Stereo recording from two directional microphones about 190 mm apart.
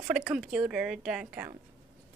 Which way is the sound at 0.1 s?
5° right (ahead or behind).